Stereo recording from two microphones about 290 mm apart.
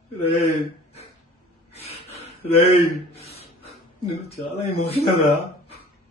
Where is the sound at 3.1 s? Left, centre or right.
Left.